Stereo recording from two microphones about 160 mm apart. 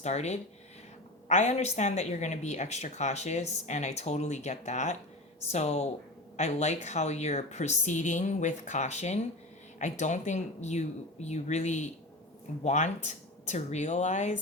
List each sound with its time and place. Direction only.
0.0 s speech: 45° left (ahead or behind)